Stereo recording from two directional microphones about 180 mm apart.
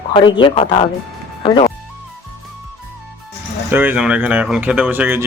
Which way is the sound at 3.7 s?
10° right (ahead or behind).